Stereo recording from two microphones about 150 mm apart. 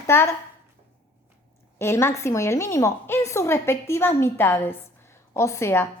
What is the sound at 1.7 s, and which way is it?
A woman's voice, 15° left (ahead or behind).